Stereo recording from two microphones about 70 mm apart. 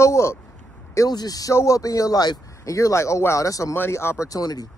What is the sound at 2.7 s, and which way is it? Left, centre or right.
Speech, left.